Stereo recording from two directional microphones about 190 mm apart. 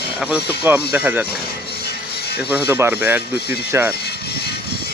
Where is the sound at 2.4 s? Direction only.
5° right (ahead or behind).